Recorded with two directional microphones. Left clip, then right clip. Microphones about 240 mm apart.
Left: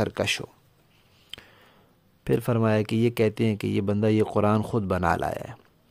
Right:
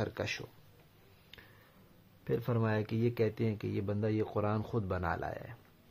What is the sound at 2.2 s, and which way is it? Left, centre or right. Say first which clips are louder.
Speech: left 10 dB; left.